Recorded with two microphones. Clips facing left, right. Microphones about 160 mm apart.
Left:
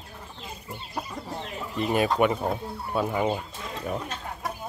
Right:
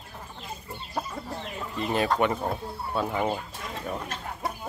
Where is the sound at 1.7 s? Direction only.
15° left (ahead or behind).